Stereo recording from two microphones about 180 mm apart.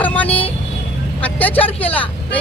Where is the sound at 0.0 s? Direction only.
10° left (ahead or behind).